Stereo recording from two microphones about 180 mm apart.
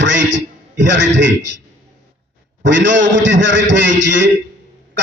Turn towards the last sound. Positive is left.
turn(degrees=-90)